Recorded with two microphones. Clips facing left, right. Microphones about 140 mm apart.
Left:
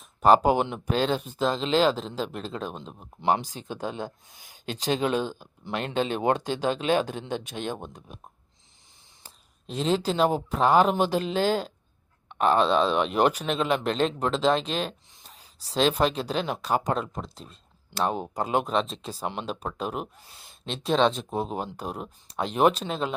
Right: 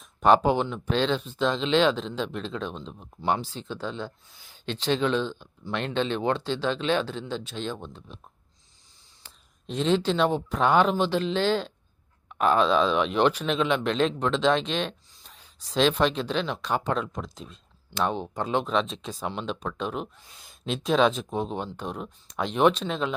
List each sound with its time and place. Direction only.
0.0 s speech: 5° left (ahead or behind)
0.6 s speech: 50° left (ahead or behind)
1.5 s speech: 5° left (ahead or behind)
7.0 s speech: 50° left (ahead or behind)
9.6 s speech: 5° left (ahead or behind)
15.3 s a sound: 35° left (ahead or behind)
15.7 s speech: 5° left (ahead or behind)
16.2 s speech: 40° left (ahead or behind)
16.7 s speech: 5° left (ahead or behind)